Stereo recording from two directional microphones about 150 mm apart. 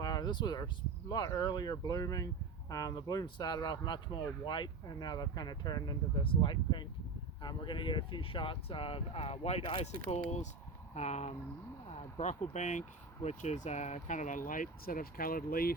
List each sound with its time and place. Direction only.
0.0 s speech: 25° left (ahead or behind); by 15.7 s 80° left